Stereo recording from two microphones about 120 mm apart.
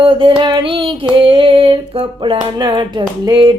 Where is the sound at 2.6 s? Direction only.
35° right (ahead or behind).